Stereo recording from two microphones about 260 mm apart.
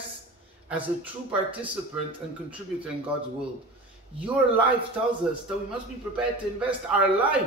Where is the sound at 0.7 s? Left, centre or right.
Centre.